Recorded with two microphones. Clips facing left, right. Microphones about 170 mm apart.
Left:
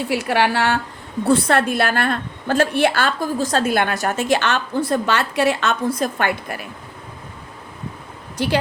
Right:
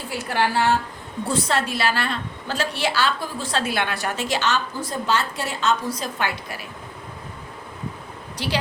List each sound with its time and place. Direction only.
0.1 s a woman's voice: 70° left (ahead or behind)
1.3 s a woman's voice: 55° left (ahead or behind)
8.4 s a woman's voice: 50° left (ahead or behind)